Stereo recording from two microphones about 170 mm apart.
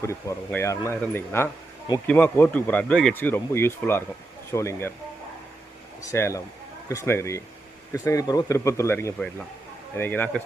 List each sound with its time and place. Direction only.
0.0 s speech: 15° left (ahead or behind)
6.0 s speech: 15° left (ahead or behind)